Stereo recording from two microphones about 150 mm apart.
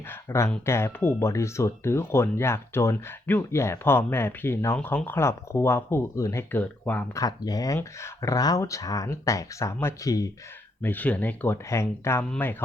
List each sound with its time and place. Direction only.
0.1 s a sound: 15° left (ahead or behind)
0.6 s speech: 15° left (ahead or behind)
7.2 s speech: 25° left (ahead or behind)
10.8 s speech: 10° left (ahead or behind)